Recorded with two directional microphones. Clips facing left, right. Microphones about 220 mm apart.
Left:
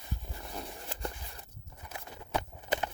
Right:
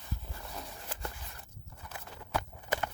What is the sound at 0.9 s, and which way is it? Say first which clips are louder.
Walk: left 3 dB; 20° left (ahead or behind).